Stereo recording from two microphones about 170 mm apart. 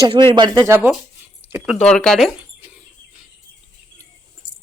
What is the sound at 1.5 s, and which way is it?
Speech, 10° right (ahead or behind).